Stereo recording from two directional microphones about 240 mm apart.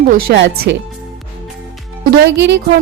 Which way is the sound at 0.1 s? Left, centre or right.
Right.